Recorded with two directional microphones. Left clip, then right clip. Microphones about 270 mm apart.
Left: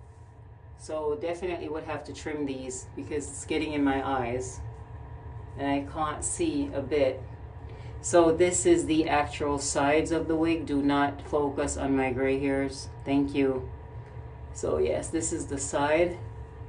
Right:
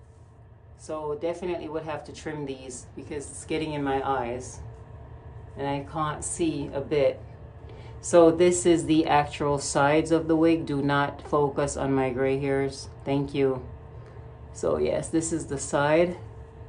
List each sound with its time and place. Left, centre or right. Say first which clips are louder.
0.8 s speech: even; centre
5.6 s speech: even; centre
14.6 s speech: right 2 dB; centre